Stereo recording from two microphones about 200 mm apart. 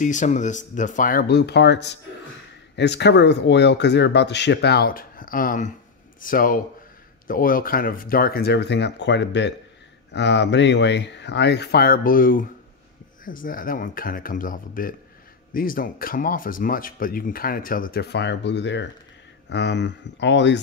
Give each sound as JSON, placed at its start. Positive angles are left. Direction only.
{"t": 0.0, "sound": "speech", "side_deg": 40}